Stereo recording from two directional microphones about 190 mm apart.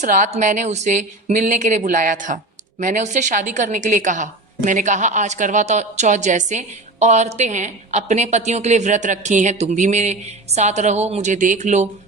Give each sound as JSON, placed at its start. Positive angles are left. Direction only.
{"t": 0.0, "sound": "speech", "side_deg": -40}